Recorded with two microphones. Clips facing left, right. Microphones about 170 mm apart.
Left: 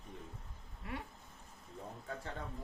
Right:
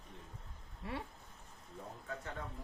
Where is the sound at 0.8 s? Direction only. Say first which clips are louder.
Right 1 dB; 25° right (ahead or behind).